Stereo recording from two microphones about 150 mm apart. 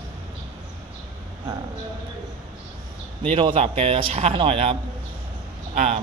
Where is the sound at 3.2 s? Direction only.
35° right (ahead or behind).